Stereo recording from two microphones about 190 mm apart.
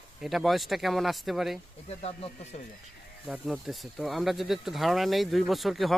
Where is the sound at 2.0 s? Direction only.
30° left (ahead or behind).